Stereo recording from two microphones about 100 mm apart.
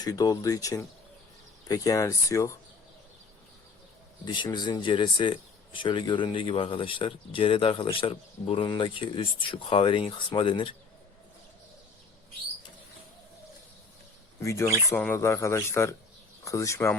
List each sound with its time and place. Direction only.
0.0 s speech: 40° left (ahead or behind)
4.5 s speech: 45° left (ahead or behind)
14.4 s a man's voice: 30° left (ahead or behind)